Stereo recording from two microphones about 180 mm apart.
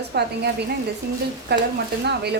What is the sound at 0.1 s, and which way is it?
Speech, 65° right (ahead or behind).